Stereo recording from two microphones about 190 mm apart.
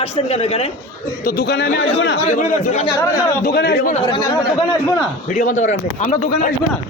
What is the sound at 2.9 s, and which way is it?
Speech, 15° left (ahead or behind).